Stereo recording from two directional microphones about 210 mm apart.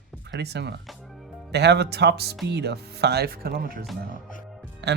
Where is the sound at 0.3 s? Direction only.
55° right (ahead or behind).